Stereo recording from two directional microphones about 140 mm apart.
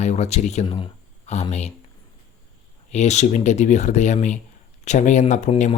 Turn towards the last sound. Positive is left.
turn(degrees=60)  # may be behind; listen again after turning